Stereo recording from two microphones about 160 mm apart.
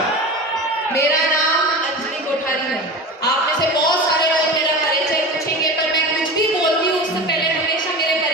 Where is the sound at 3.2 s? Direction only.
25° left (ahead or behind).